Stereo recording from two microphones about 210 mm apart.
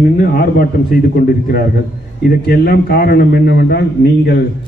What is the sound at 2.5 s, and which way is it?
A man's voice, 50° left (ahead or behind).